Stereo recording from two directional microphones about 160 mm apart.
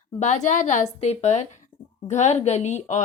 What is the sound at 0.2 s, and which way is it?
A woman's voice, 50° left (ahead or behind).